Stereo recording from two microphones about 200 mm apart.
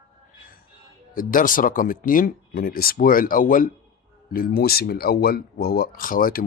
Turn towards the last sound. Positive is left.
turn(degrees=45)  # may be behind; listen again after turning